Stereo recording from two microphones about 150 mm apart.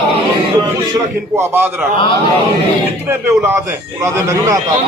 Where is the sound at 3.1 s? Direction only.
15° right (ahead or behind).